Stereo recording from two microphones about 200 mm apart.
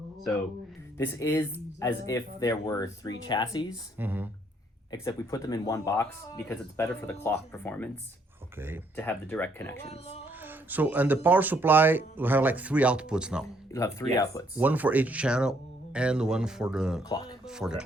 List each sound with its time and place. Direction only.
0.9 s speech: 15° left (ahead or behind)
3.7 s speech: 10° right (ahead or behind)
4.9 s speech: 15° left (ahead or behind)
8.5 s speech: 10° right (ahead or behind)
9.0 s speech: 10° left (ahead or behind)
9.8 s speech: 30° left (ahead or behind)
10.2 s speech: 10° right (ahead or behind)
13.7 s speech: 15° left (ahead or behind)
14.5 s speech: 10° right (ahead or behind)
17.0 s speech: 20° left (ahead or behind)
17.4 s speech: 5° right (ahead or behind)